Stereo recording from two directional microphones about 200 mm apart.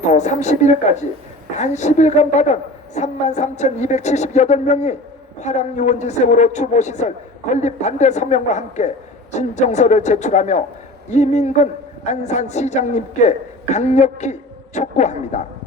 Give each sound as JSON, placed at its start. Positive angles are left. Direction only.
{"t": 0.0, "sound": "a man's voice", "side_deg": 35}